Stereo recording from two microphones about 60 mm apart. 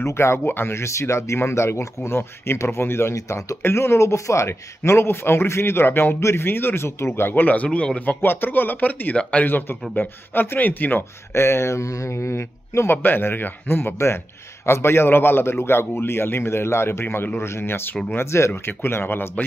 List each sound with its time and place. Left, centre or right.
0.0 s speech: left
3.2 s speech: left
3.6 s speech: left; by 8.0 s centre
8.2 s speech: left
9.5 s speech: left
12.9 s speech: left
18.5 s speech: left